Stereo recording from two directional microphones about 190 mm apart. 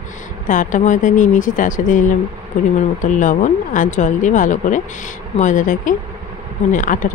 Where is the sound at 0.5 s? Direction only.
45° left (ahead or behind).